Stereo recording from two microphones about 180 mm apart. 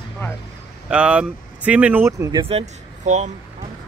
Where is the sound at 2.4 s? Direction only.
35° right (ahead or behind).